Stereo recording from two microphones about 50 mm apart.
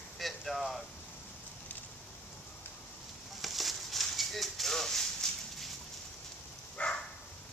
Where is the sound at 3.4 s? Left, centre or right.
Centre.